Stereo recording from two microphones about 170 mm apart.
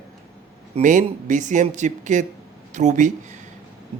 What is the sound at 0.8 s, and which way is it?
Speech, 45° right (ahead or behind).